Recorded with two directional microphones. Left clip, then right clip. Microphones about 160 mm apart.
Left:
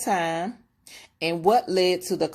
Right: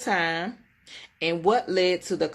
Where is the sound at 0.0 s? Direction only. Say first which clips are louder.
Left 1 dB; 40° left (ahead or behind).